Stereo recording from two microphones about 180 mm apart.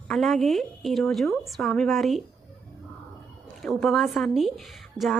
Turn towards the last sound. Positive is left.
turn(degrees=0)  # may be behind; listen again after turning